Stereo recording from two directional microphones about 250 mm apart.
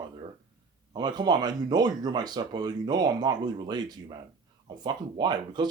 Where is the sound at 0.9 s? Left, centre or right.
Centre.